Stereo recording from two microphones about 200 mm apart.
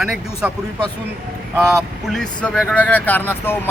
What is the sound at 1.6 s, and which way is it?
A man's voice, centre (ahead or behind).